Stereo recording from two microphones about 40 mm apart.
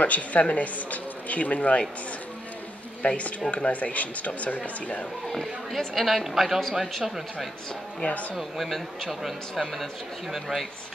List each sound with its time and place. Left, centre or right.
0.0 s speech: left
3.0 s speech: left
5.3 s speech: centre